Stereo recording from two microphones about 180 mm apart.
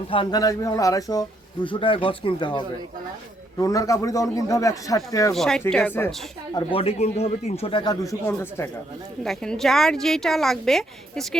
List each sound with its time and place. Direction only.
0.1 s a man's voice: 25° left (ahead or behind)
5.3 s a woman's voice: centre (ahead or behind)
6.5 s speech: 25° left (ahead or behind)
9.2 s a woman's voice: 5° left (ahead or behind)